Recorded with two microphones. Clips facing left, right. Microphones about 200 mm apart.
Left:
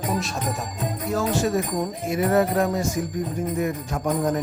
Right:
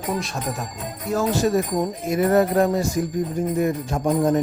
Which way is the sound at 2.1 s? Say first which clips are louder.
Right 3 dB; 40° right (ahead or behind).